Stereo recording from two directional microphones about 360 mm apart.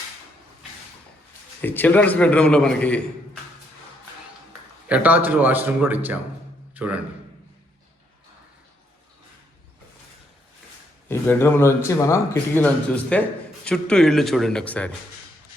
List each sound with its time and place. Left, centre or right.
1.6 s a man's voice: centre
4.9 s a man's voice: centre
11.1 s a man's voice: centre